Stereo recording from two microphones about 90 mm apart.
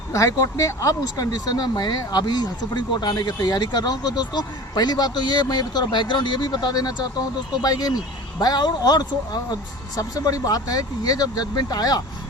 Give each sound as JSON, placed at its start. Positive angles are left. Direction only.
{"t": 0.1, "sound": "speech", "side_deg": 35}